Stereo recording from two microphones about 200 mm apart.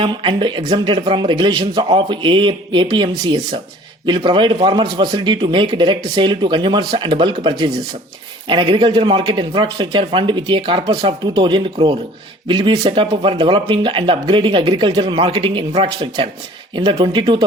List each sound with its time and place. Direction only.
0.0 s speech: 25° right (ahead or behind)